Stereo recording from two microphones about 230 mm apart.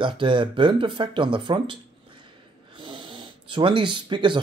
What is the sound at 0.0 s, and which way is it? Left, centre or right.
Speech, right.